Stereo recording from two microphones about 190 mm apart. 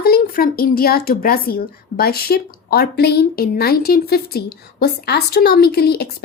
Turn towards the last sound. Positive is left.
turn(degrees=55)  # may be behind; listen again after turning